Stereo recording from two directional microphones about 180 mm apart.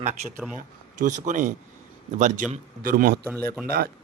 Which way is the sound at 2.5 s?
55° right (ahead or behind).